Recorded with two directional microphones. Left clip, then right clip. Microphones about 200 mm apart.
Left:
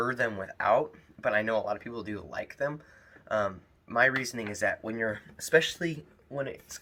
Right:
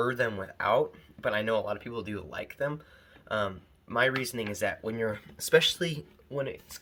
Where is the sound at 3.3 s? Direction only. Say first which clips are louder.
Left 2 dB; 40° right (ahead or behind).